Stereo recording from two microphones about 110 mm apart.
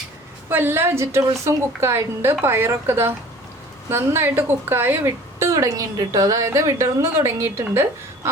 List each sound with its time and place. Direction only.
0.4 s a woman's voice: 20° right (ahead or behind)